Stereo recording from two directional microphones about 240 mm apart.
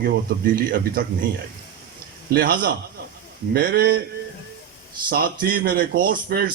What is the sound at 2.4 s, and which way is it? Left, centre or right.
Speech, right.